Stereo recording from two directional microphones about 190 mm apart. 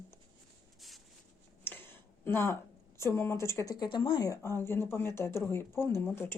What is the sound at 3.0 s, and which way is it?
Speech, 15° left (ahead or behind).